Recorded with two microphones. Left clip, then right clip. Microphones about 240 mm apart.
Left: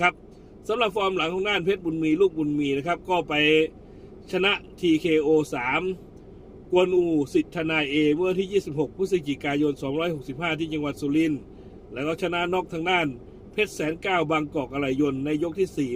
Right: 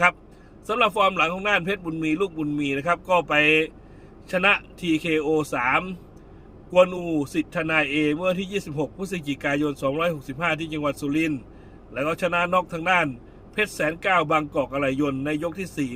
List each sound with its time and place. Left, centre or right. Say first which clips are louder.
0.7 s a man's voice: right 3 dB; centre